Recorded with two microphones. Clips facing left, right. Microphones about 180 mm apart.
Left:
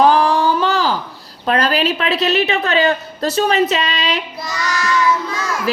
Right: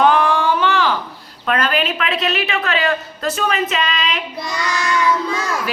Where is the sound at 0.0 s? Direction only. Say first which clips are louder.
Left 2 dB; 35° left (ahead or behind).